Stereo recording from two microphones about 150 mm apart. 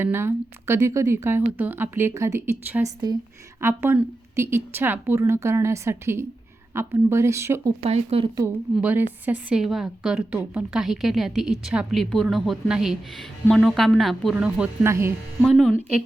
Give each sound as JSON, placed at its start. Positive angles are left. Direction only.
{"t": 0.0, "sound": "a woman's voice", "side_deg": -15}
{"t": 7.8, "sound": "speech", "side_deg": -45}
{"t": 8.7, "sound": "a woman's voice", "side_deg": -10}
{"t": 14.3, "sound": "a woman's voice", "side_deg": -10}